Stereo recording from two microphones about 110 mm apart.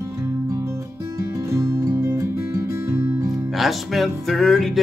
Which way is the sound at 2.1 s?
25° right (ahead or behind).